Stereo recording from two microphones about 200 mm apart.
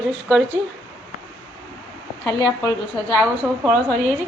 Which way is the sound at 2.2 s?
10° left (ahead or behind).